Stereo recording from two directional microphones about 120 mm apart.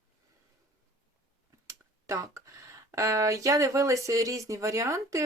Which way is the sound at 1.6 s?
25° right (ahead or behind).